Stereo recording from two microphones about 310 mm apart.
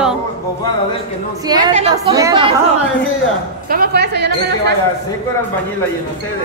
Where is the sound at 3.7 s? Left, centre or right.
Right.